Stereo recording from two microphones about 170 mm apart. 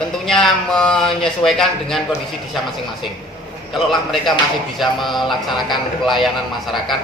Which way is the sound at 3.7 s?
Centre (ahead or behind).